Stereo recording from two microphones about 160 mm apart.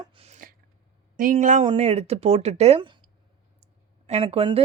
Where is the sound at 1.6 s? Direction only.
40° right (ahead or behind).